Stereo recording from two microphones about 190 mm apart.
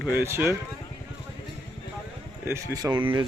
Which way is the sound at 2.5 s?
15° right (ahead or behind).